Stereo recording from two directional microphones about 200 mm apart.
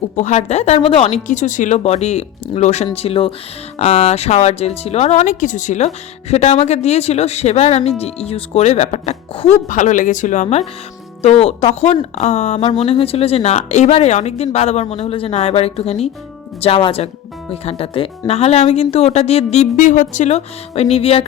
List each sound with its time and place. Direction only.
0.2 s speech: 35° left (ahead or behind)